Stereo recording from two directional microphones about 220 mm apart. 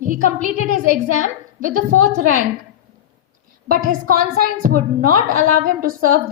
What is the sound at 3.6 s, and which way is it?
A woman's voice, 40° right (ahead or behind).